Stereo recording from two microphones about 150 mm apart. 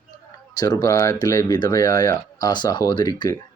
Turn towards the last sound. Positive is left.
turn(degrees=30)  # may be behind; listen again after turning